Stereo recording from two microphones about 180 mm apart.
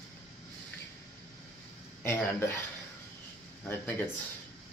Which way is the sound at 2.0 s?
10° left (ahead or behind).